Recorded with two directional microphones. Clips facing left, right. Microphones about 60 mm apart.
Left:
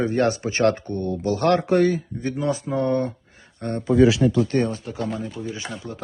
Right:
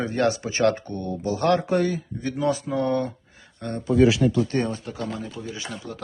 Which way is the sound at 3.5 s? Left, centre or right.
Left.